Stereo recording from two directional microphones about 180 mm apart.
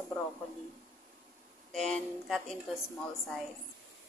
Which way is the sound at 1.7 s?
Centre (ahead or behind).